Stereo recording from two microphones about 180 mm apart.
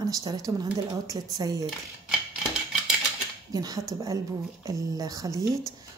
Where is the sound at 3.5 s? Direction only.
20° right (ahead or behind).